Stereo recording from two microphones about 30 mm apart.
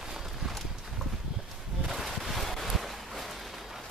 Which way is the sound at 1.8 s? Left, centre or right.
Centre.